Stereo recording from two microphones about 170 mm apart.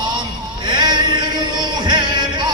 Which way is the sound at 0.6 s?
25° right (ahead or behind).